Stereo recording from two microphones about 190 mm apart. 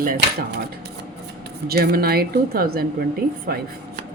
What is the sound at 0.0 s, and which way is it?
Speech, 55° right (ahead or behind).